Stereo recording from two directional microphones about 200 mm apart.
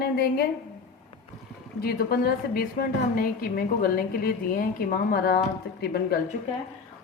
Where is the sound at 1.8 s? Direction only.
50° left (ahead or behind).